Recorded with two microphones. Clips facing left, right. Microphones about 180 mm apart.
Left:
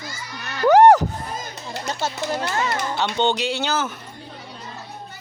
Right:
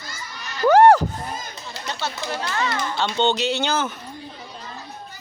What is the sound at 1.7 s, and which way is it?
Speech, 45° left (ahead or behind).